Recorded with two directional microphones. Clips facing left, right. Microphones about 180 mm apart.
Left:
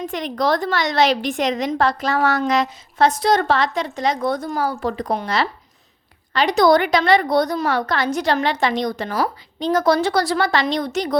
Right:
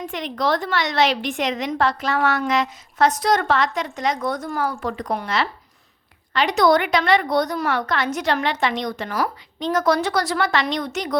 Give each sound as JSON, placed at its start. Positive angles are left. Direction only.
{"t": 0.1, "sound": "a woman's voice", "side_deg": 40}